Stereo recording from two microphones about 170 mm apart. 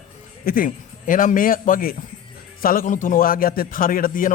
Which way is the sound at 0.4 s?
55° left (ahead or behind).